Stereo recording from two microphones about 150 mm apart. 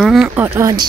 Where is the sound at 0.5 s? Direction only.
20° right (ahead or behind).